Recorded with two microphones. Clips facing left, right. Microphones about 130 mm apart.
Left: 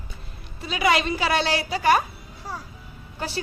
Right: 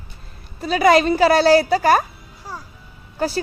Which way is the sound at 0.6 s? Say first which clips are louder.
Right 8 dB; 40° right (ahead or behind).